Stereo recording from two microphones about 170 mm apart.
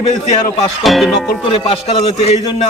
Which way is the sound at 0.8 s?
Centre (ahead or behind).